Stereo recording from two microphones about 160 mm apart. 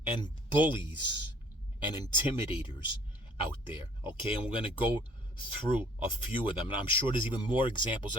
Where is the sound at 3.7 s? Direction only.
30° left (ahead or behind).